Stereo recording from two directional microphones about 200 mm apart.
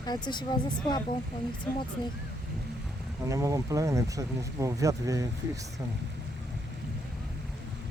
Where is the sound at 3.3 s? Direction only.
15° right (ahead or behind).